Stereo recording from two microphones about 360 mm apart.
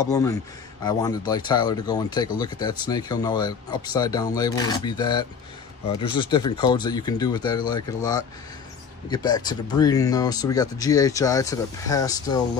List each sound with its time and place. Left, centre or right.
0.0 s speech: centre